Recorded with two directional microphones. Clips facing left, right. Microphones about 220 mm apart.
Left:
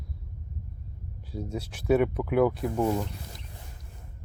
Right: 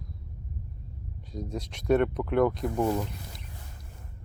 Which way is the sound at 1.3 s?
5° left (ahead or behind).